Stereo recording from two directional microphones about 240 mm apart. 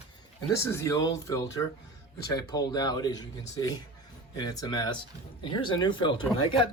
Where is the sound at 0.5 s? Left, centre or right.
Centre.